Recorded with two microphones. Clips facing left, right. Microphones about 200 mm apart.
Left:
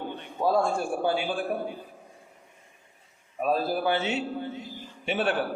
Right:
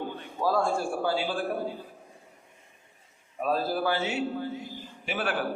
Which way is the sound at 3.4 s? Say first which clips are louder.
Left 2 dB; 15° left (ahead or behind).